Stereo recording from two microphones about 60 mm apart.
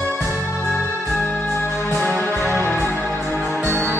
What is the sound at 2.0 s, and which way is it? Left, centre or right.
Music, left.